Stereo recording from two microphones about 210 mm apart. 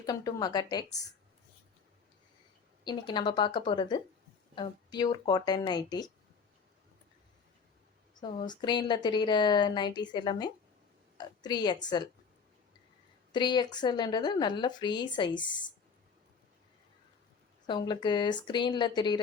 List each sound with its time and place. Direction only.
0.0 s speech: 20° left (ahead or behind)
2.8 s speech: 20° left (ahead or behind)
8.2 s speech: 20° left (ahead or behind)
13.3 s speech: 20° left (ahead or behind)
17.7 s speech: 20° left (ahead or behind)